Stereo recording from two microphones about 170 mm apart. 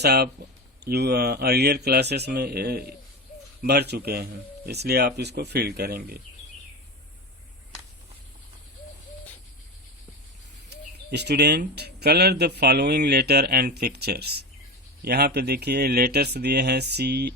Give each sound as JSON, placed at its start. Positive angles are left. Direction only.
{"t": 0.0, "sound": "speech", "side_deg": -65}
{"t": 11.1, "sound": "speech", "side_deg": -75}